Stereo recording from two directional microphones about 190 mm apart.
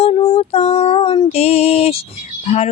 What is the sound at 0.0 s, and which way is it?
Female singing, 35° left (ahead or behind).